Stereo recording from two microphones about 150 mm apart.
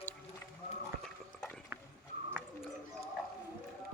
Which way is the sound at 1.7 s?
15° right (ahead or behind).